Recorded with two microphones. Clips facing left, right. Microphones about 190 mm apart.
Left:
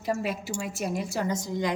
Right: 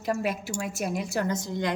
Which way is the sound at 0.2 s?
55° right (ahead or behind).